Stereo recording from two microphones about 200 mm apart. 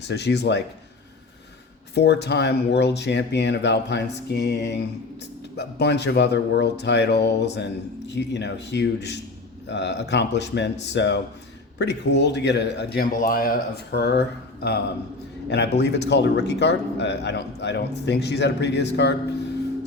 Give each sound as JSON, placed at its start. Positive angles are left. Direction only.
{"t": 0.0, "sound": "speech", "side_deg": 60}
{"t": 2.0, "sound": "speech", "side_deg": 55}